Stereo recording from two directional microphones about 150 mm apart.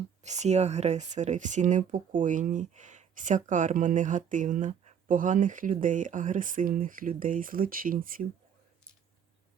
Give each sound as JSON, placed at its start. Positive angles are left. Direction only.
{"t": 0.2, "sound": "speech", "side_deg": -50}